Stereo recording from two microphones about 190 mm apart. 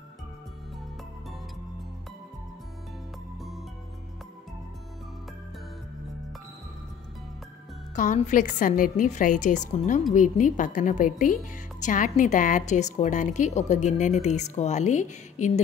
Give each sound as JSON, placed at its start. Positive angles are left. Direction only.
{"t": 7.9, "sound": "a woman's voice", "side_deg": 40}